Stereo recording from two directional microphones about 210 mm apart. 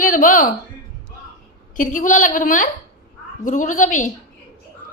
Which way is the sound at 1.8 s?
40° left (ahead or behind).